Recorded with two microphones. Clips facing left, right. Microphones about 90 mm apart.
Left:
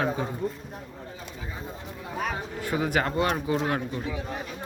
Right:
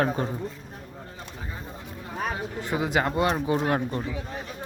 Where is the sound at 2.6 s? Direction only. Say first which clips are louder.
Right 1 dB; 20° right (ahead or behind).